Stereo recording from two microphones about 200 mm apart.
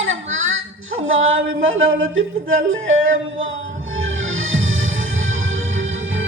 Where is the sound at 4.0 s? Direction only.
80° right.